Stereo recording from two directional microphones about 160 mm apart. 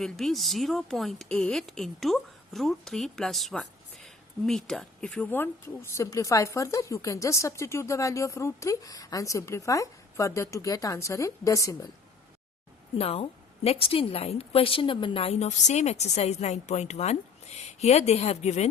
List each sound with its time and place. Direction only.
0.0 s speech: centre (ahead or behind); by 11.9 s 20° left (ahead or behind)
13.0 s a woman's voice: 40° left (ahead or behind)